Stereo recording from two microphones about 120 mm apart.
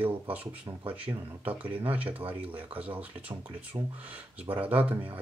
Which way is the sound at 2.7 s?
10° right (ahead or behind).